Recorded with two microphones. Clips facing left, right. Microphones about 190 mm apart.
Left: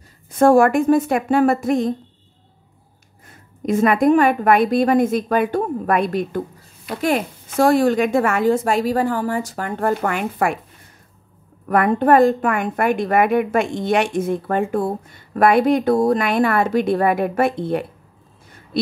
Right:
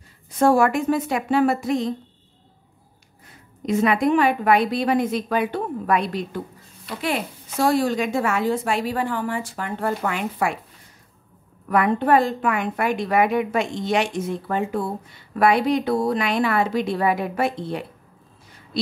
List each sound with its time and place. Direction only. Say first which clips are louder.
0.3 s a woman's voice: left 5 dB; 50° left (ahead or behind)
3.6 s a woman's voice: left 4 dB; 50° left (ahead or behind)
11.6 s a woman's voice: left 3 dB; 50° left (ahead or behind)